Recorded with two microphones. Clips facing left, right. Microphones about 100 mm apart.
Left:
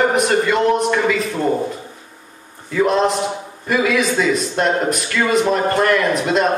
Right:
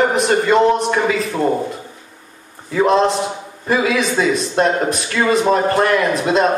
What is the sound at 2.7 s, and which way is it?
A man's voice, 30° right (ahead or behind).